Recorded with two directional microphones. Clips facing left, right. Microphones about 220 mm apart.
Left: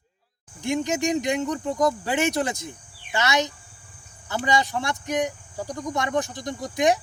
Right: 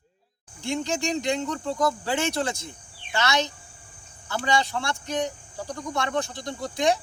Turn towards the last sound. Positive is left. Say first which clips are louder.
# left 2 dB
turn(degrees=20)  # may be behind; listen again after turning